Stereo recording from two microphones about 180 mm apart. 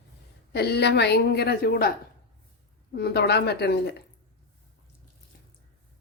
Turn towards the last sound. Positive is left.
turn(degrees=65)  # may be behind; listen again after turning